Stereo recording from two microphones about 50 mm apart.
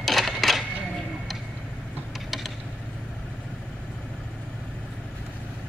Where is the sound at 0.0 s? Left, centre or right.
Centre.